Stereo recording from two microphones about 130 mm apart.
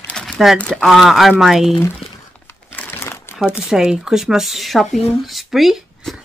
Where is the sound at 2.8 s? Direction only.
20° left (ahead or behind).